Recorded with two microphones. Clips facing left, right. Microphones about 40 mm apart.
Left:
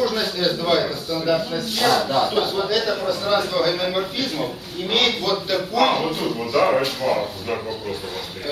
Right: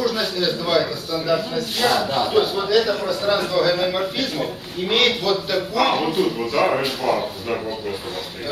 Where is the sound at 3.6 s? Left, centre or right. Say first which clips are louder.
Right 2 dB; centre.